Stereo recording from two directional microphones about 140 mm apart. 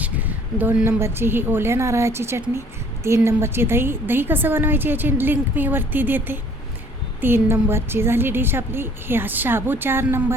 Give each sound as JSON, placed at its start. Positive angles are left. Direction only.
{"t": 0.0, "sound": "a woman's voice", "side_deg": -10}